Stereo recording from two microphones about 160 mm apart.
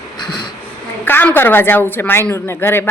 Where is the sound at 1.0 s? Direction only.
10° left (ahead or behind).